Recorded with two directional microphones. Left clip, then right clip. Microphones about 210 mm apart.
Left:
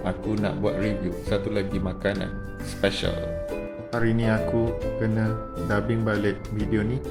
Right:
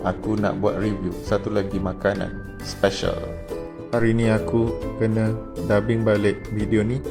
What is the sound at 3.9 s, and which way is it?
Speech, 20° right (ahead or behind).